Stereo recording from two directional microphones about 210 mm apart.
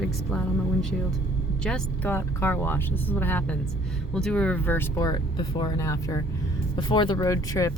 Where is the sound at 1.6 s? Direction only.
5° left (ahead or behind).